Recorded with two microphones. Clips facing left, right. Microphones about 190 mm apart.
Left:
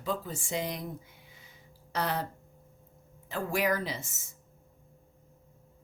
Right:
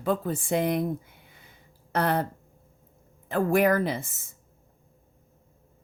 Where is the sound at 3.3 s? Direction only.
55° right (ahead or behind).